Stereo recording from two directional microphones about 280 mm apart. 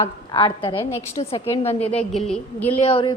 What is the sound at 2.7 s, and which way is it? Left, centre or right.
Speech, centre.